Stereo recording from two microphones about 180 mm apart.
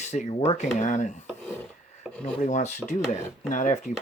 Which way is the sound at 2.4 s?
40° left (ahead or behind).